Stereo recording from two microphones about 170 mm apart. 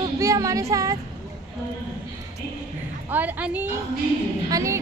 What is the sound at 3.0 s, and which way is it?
A woman's voice, 10° right (ahead or behind).